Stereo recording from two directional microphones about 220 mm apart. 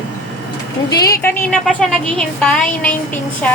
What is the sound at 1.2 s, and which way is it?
A woman's voice, 5° left (ahead or behind).